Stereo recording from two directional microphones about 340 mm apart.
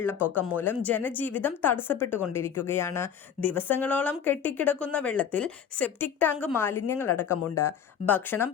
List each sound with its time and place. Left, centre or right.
0.0 s speech: centre
7.5 s speech: left
8.0 s speech: centre